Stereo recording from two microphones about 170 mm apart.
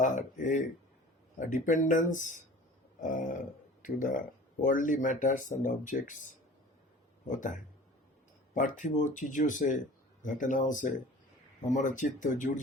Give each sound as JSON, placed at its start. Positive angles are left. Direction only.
{"t": 0.0, "sound": "a sound", "side_deg": 50}
{"t": 1.4, "sound": "speech", "side_deg": 50}
{"t": 7.3, "sound": "speech", "side_deg": 50}